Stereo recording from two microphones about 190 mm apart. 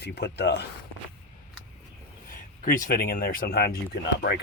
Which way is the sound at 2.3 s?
45° left (ahead or behind).